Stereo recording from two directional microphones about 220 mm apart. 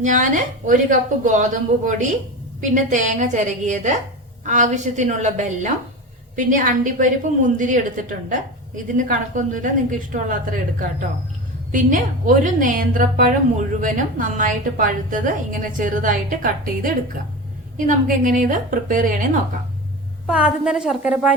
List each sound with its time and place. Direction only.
0.0 s a woman's voice: 35° right (ahead or behind)
20.2 s a woman's voice: 5° right (ahead or behind)